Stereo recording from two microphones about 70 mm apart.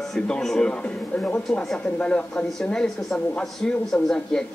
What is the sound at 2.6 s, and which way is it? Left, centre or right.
A man's voice, centre.